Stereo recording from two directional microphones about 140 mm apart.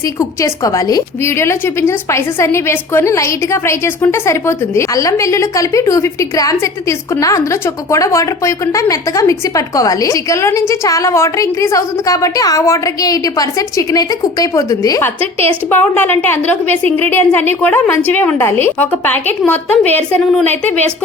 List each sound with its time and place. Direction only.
0.0 s a woman's voice: 20° left (ahead or behind)